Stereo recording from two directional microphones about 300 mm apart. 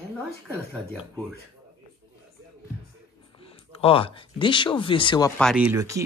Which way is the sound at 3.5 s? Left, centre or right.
Centre.